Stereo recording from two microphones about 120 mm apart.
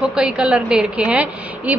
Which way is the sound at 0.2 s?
10° right (ahead or behind).